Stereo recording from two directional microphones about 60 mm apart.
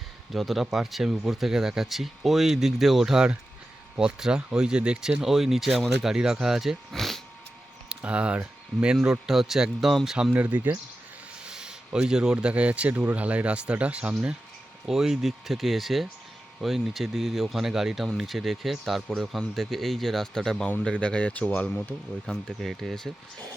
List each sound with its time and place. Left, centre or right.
0.3 s speech: centre
6.9 s speech: centre
7.9 s speech: centre
10.3 s speech: right
11.4 s a sound: centre
11.9 s speech: centre
14.8 s speech: centre; by 21.8 s left
22.3 s speech: centre